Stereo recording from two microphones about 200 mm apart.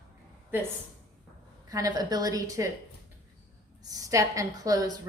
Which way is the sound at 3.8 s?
20° right (ahead or behind).